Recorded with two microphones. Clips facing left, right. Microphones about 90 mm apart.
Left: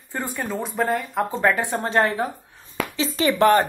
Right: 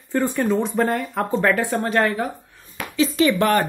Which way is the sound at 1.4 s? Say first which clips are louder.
Right 1 dB; 20° left (ahead or behind).